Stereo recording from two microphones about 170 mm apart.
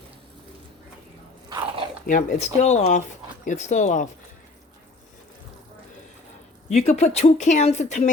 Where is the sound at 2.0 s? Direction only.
50° left (ahead or behind).